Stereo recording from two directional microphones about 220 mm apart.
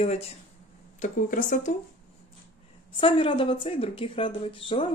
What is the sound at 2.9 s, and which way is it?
Speech, 25° left (ahead or behind).